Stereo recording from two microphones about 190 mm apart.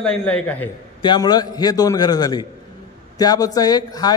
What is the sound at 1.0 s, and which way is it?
A man's voice, 20° left (ahead or behind).